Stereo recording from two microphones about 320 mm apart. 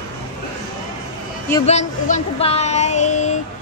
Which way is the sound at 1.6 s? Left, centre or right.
Left.